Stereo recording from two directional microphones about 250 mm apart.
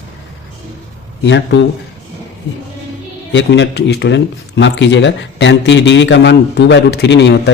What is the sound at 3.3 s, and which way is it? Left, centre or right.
Speech, left.